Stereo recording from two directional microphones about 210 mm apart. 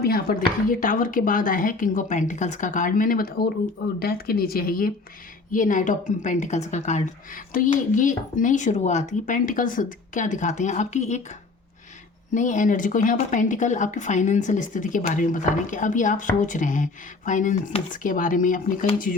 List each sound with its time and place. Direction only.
0.0 s speech: 45° left (ahead or behind)
12.3 s speech: 35° left (ahead or behind)